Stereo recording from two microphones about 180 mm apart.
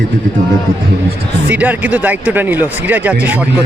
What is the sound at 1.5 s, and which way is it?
Speech, 10° right (ahead or behind).